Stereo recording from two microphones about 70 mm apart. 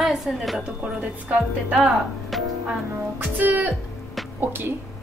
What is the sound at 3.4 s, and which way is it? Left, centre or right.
Speech, right.